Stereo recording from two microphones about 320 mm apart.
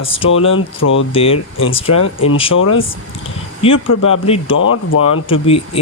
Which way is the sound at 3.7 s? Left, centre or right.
Left.